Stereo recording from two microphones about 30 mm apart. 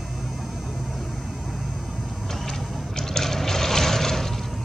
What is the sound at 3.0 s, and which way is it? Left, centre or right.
Vehicle, centre.